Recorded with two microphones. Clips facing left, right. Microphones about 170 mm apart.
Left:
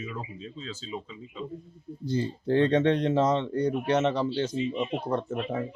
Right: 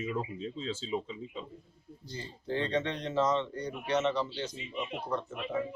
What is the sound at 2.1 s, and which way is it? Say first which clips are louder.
Speech: left 10 dB; 55° left (ahead or behind).